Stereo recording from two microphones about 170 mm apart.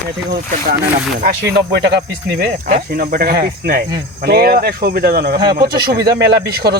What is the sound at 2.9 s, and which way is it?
Cricket, 60° right (ahead or behind).